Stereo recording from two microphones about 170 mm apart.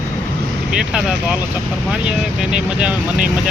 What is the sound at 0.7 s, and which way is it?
Speech, 5° right (ahead or behind).